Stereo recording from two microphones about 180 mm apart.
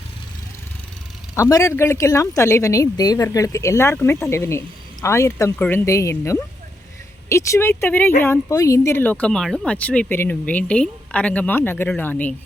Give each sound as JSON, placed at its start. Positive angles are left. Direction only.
{"t": 1.4, "sound": "a woman's voice", "side_deg": 20}